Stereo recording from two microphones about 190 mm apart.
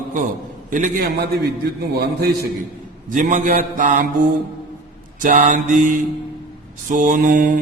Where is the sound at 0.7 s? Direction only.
45° right (ahead or behind).